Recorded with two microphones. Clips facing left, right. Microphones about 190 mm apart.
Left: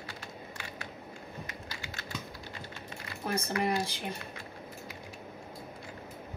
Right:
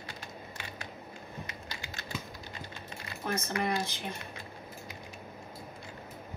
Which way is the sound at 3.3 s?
35° left (ahead or behind).